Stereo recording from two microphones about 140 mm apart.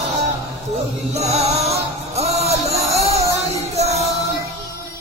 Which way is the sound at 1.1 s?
50° right (ahead or behind).